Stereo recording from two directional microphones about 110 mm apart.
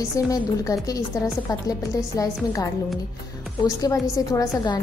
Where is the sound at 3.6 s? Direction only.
30° left (ahead or behind).